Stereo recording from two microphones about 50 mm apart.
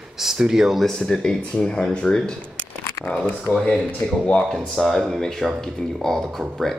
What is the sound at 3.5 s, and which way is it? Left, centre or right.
Speech, left.